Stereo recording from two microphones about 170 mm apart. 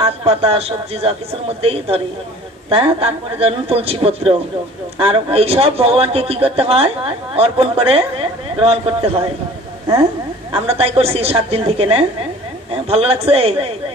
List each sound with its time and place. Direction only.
0.0 s speech: 35° right (ahead or behind)
10.5 s speech: 35° right (ahead or behind)